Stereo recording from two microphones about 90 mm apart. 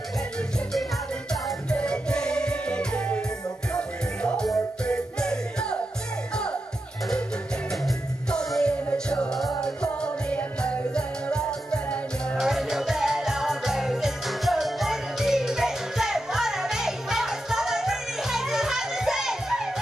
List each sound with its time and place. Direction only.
1.3 s music: 10° left (ahead or behind)
7.8 s music: 5° left (ahead or behind)
12.4 s music: 5° right (ahead or behind)